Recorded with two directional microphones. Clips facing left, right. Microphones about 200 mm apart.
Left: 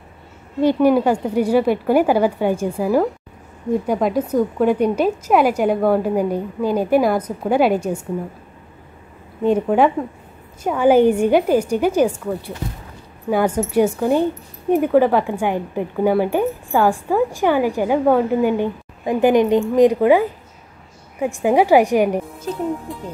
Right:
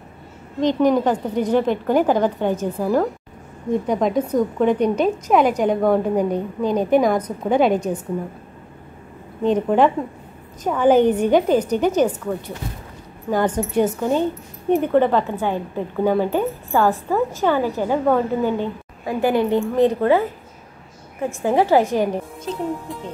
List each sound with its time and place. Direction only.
0.6 s a woman's voice: 10° left (ahead or behind)
9.4 s a woman's voice: 10° left (ahead or behind)